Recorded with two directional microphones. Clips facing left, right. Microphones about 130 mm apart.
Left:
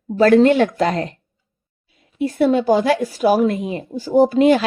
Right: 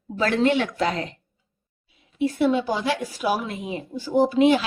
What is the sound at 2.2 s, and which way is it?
A woman's voice, 45° left (ahead or behind).